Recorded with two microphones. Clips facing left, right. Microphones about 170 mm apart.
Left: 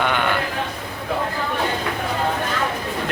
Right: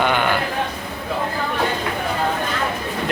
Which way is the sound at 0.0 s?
5° right (ahead or behind).